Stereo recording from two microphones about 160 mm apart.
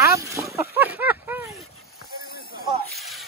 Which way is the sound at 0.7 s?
10° right (ahead or behind).